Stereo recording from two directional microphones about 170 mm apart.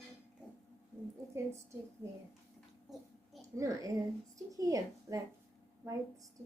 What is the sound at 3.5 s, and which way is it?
A woman's voice, 20° right (ahead or behind).